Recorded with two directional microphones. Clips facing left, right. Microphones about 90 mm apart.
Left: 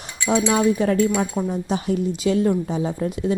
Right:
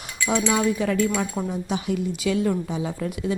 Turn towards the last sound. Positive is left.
turn(degrees=30)  # may be behind; listen again after turning